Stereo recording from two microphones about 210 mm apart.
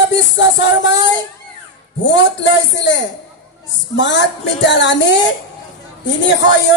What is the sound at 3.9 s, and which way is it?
Speech, 60° left (ahead or behind).